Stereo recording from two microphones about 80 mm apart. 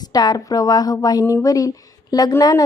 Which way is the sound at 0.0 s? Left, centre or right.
Left.